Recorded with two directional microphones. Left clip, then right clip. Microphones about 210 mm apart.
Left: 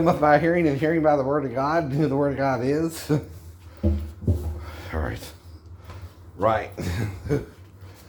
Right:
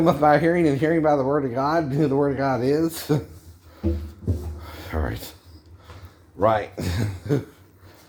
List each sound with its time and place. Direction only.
0.0 s speech: 35° right (ahead or behind)
4.6 s a sound: 30° right (ahead or behind)
6.4 s speech: 35° right (ahead or behind)